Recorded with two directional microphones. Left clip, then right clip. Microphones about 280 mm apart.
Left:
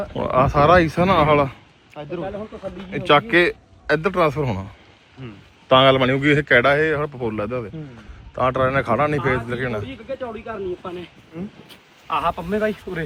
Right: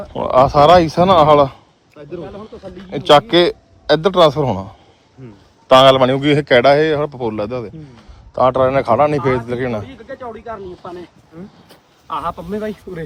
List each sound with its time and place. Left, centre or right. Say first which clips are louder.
0.1 s a man's voice: right 7 dB; centre
3.1 s a man's voice: right 5 dB; centre
5.2 s speech: even; centre
5.7 s a man's voice: right 6 dB; centre
12.0 s a man's voice: left 1 dB; centre